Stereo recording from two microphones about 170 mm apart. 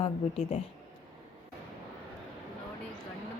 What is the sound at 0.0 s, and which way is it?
Speech, 35° left (ahead or behind).